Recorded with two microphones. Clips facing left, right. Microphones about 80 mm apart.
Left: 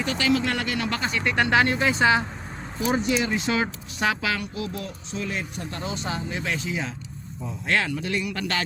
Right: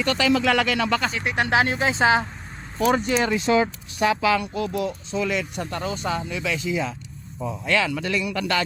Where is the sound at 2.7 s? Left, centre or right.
Right.